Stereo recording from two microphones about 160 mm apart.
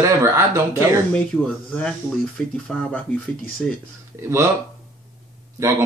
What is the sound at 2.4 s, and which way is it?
Speech, 5° left (ahead or behind).